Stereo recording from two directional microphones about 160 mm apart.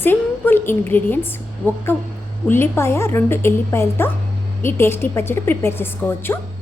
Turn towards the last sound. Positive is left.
turn(degrees=15)  # may be behind; listen again after turning